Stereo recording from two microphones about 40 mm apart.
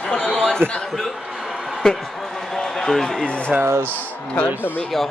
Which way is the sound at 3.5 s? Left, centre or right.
Right.